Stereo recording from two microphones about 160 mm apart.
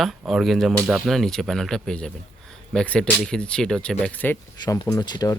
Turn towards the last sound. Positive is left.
turn(degrees=25)  # may be behind; listen again after turning